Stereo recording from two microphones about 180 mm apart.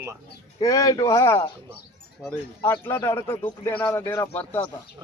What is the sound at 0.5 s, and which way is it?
Speech, 20° left (ahead or behind).